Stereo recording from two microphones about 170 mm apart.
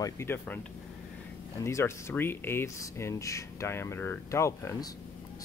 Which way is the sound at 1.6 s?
15° left (ahead or behind).